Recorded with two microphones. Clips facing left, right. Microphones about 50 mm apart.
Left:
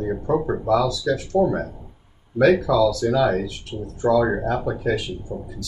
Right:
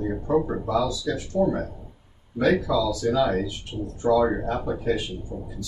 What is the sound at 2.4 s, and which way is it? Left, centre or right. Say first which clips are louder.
Speech: left 5 dB; left.